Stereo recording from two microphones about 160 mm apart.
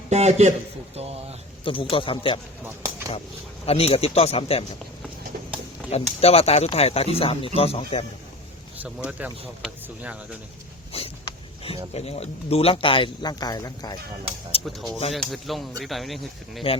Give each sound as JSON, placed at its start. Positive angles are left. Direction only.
{"t": 0.1, "sound": "a man's voice", "side_deg": -45}
{"t": 1.6, "sound": "speech", "side_deg": 35}
{"t": 3.7, "sound": "speech", "side_deg": 40}
{"t": 5.9, "sound": "speech", "side_deg": 40}
{"t": 9.0, "sound": "speech", "side_deg": -10}
{"t": 10.9, "sound": "a sound", "side_deg": 35}
{"t": 11.9, "sound": "speech", "side_deg": 40}
{"t": 14.7, "sound": "speech", "side_deg": 0}